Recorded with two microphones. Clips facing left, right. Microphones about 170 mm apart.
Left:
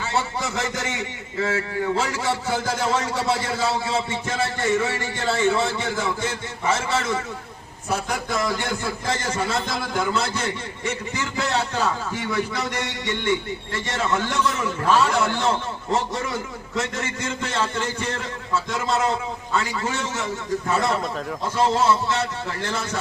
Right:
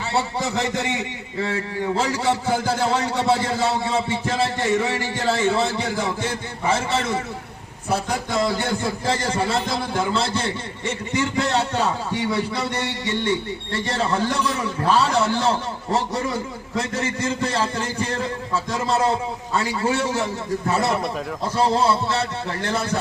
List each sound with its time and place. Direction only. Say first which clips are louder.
0.1 s a man's voice: right 3 dB; 35° right (ahead or behind)